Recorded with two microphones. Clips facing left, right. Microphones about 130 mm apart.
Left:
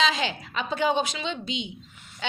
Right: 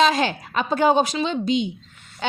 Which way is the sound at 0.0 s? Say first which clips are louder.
Right 7 dB; 45° right (ahead or behind).